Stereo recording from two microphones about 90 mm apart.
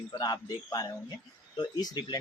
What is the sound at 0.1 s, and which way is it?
A man's voice, 45° left (ahead or behind).